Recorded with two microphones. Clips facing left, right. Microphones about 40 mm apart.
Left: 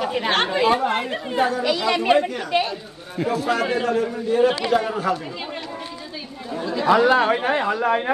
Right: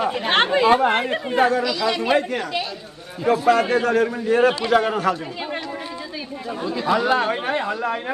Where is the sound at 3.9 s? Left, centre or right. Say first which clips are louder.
Right 2 dB; right.